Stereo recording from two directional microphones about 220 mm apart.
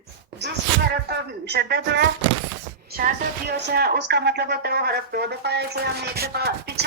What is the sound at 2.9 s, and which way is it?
A woman's voice, 45° right (ahead or behind).